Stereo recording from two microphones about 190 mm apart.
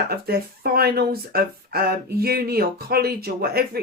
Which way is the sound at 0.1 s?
55° right (ahead or behind).